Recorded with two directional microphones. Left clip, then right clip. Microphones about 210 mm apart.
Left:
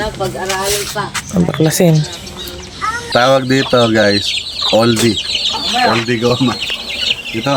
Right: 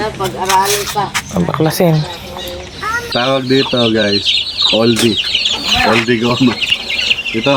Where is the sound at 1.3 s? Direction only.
25° left (ahead or behind).